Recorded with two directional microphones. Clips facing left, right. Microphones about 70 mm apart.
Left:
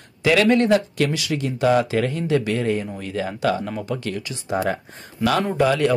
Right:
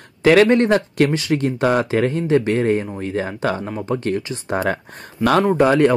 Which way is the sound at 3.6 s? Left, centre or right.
Right.